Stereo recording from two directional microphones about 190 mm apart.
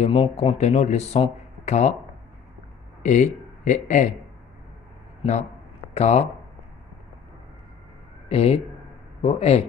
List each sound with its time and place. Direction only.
0.0 s speech: 30° left (ahead or behind)
3.0 s a man's voice: 40° left (ahead or behind)
5.9 s speech: 35° left (ahead or behind)
8.3 s speech: 30° left (ahead or behind)